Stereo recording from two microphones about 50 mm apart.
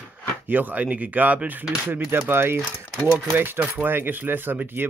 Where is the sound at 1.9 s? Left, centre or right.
Right.